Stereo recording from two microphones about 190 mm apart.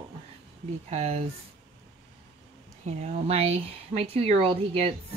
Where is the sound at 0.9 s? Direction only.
35° right (ahead or behind).